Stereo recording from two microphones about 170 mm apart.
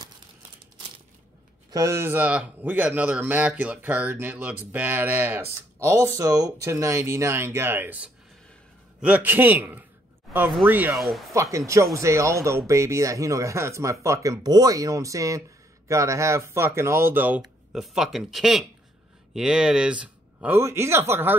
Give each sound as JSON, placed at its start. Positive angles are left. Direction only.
{"t": 1.7, "sound": "speech", "side_deg": -20}